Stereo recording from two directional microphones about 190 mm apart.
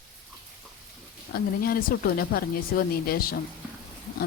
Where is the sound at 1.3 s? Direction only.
50° left (ahead or behind).